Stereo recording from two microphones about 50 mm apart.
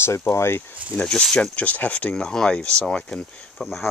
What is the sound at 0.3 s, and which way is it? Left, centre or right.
Speech, left.